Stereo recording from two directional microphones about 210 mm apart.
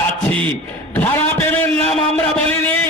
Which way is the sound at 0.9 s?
10° left (ahead or behind).